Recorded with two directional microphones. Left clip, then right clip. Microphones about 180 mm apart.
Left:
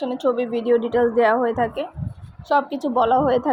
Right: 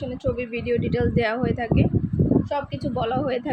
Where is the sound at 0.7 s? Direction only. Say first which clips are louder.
Left 6 dB; 10° left (ahead or behind).